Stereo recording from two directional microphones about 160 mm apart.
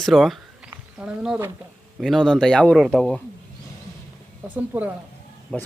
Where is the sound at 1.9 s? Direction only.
Centre (ahead or behind).